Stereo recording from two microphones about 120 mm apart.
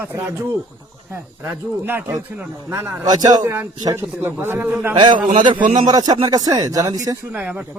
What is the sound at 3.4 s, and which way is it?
A man's voice, 15° right (ahead or behind).